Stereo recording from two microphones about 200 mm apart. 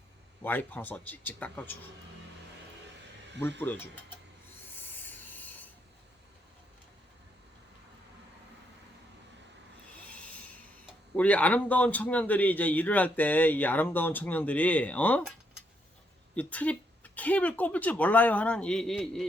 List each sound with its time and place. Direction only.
0.4 s a man's voice: 10° left (ahead or behind)
4.8 s rub: 10° left (ahead or behind)
10.1 s a sound: 5° left (ahead or behind)
11.2 s a man's voice: 5° left (ahead or behind)
16.3 s a man's voice: 5° left (ahead or behind)